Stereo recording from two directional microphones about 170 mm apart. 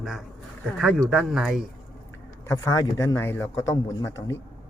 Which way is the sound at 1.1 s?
5° right (ahead or behind).